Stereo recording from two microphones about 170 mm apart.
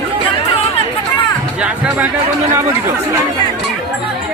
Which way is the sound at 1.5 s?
5° right (ahead or behind).